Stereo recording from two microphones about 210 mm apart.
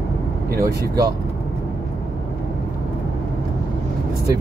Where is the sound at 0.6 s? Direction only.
15° right (ahead or behind).